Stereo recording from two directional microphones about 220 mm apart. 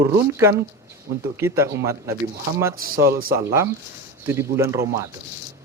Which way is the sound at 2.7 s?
40° right (ahead or behind).